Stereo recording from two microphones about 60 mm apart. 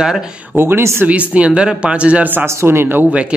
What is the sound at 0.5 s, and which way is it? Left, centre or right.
Speech, right.